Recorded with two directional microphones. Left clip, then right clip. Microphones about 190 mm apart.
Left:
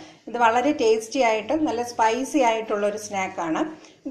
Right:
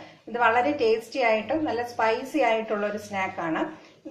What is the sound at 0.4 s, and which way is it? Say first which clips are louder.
A woman's voice: left 2 dB; 45° left (ahead or behind).